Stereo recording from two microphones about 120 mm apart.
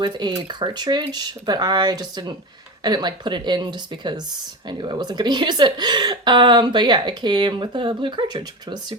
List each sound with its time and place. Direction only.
0.0 s a woman's voice: 35° right (ahead or behind)